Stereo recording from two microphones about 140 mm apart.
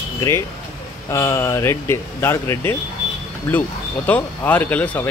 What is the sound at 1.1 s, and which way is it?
Speech, 20° left (ahead or behind).